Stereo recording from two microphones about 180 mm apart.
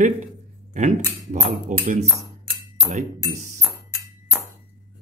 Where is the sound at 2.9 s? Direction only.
40° right (ahead or behind).